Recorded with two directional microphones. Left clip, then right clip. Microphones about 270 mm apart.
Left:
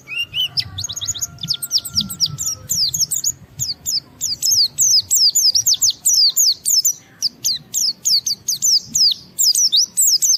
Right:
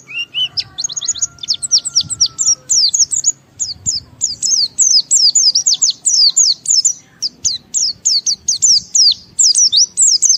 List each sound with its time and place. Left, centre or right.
0.5 s chirp: centre
2.0 s bird: centre